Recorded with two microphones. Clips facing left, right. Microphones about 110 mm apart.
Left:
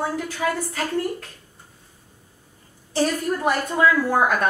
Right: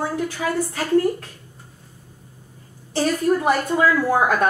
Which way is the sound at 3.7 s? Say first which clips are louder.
Left 1 dB; centre (ahead or behind).